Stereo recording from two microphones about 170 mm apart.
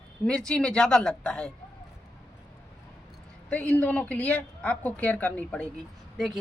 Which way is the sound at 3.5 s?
10° left (ahead or behind).